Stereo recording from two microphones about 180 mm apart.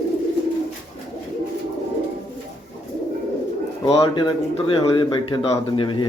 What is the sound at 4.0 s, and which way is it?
A man's voice, 25° left (ahead or behind).